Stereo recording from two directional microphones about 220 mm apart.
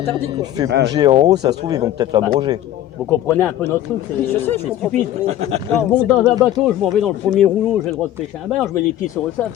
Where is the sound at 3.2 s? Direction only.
10° left (ahead or behind).